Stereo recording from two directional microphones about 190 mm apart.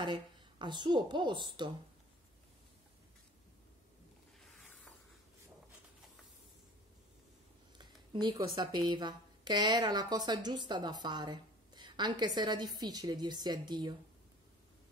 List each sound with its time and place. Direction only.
0.0 s speech: 25° right (ahead or behind)
7.7 s speech: 25° right (ahead or behind)